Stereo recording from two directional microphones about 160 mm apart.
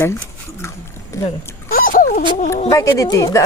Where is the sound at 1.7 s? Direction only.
60° left (ahead or behind).